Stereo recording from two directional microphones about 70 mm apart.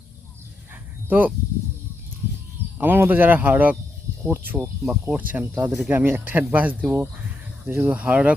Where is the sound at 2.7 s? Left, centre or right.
Right.